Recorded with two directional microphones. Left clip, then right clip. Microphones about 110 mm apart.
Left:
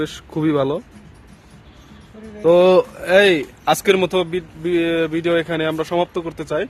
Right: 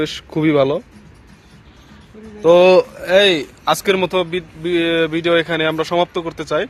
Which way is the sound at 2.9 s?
45° left (ahead or behind).